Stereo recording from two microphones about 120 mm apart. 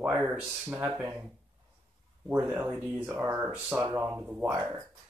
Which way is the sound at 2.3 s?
15° right (ahead or behind).